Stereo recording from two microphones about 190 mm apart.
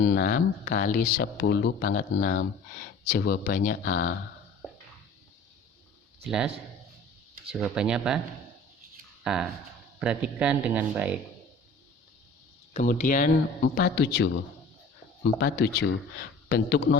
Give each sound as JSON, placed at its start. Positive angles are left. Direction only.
{"t": 0.0, "sound": "speech", "side_deg": 50}
{"t": 6.2, "sound": "speech", "side_deg": 0}
{"t": 7.5, "sound": "speech", "side_deg": -5}
{"t": 9.2, "sound": "speech", "side_deg": -5}
{"t": 12.7, "sound": "speech", "side_deg": 40}
{"t": 13.6, "sound": "a man's voice", "side_deg": 60}